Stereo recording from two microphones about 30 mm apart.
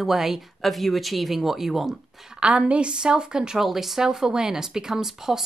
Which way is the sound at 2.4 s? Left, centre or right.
Right.